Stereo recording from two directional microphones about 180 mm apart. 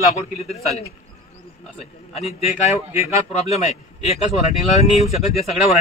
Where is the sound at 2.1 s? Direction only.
35° left (ahead or behind).